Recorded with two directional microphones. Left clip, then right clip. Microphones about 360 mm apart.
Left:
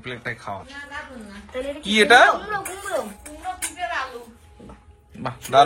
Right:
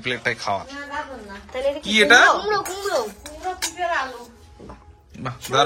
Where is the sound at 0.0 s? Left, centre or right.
Centre.